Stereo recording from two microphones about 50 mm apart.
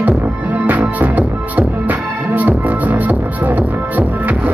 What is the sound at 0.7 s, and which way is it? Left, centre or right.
Music, right.